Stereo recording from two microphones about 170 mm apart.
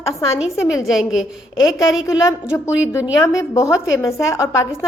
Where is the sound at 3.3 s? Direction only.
15° left (ahead or behind).